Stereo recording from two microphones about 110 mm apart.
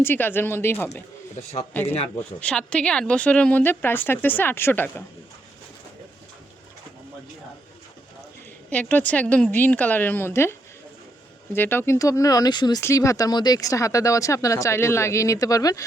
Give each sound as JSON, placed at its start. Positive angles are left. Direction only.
{"t": 0.0, "sound": "speech", "side_deg": 20}
{"t": 8.7, "sound": "speech", "side_deg": 15}
{"t": 11.5, "sound": "speech", "side_deg": 20}
{"t": 12.8, "sound": "speech", "side_deg": 30}